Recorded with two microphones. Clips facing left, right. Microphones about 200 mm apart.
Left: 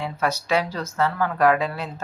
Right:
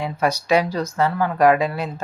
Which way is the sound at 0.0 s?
15° right (ahead or behind).